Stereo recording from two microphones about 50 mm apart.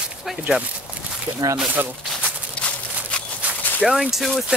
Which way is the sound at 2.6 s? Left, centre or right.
Left.